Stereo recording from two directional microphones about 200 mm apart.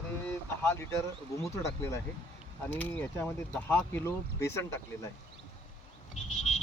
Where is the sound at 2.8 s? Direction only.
10° left (ahead or behind).